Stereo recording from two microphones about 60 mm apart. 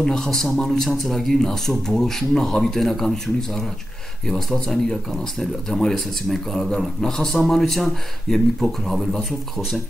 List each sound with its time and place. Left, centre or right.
0.0 s speech: centre